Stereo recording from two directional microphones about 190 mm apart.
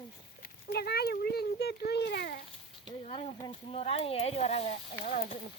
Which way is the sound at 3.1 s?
30° left (ahead or behind).